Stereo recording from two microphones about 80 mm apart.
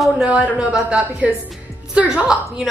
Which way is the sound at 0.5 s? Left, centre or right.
Centre.